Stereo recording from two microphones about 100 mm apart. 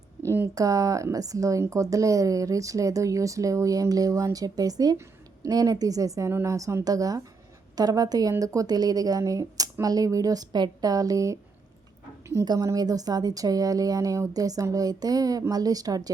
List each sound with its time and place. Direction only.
0.5 s speech: 35° right (ahead or behind)
12.5 s speech: 40° right (ahead or behind)